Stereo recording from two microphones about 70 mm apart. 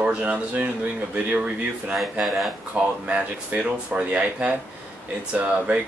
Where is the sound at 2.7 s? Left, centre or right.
Centre.